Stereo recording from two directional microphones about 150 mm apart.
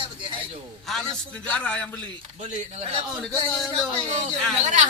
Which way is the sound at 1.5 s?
10° left (ahead or behind).